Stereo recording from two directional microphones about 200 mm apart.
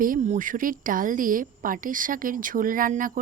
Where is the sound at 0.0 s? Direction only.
40° right (ahead or behind).